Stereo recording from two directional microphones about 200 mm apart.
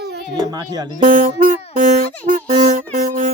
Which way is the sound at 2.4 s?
40° right (ahead or behind).